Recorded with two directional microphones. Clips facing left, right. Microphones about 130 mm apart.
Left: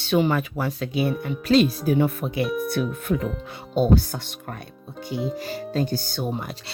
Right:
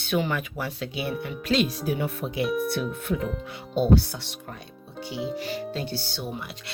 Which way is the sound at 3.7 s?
45° left (ahead or behind).